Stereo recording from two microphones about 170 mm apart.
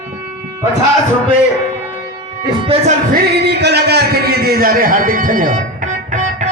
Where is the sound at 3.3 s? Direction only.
75° right (ahead or behind).